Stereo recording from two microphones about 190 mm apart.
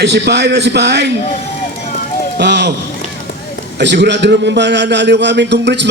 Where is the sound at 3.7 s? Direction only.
65° right (ahead or behind).